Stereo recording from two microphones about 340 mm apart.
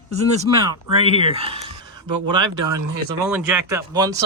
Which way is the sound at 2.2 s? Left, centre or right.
Right.